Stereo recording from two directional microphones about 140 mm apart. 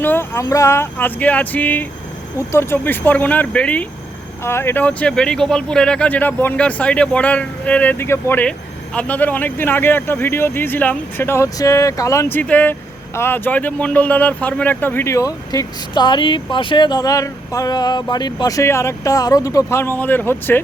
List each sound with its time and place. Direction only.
0.0 s speech: 15° left (ahead or behind)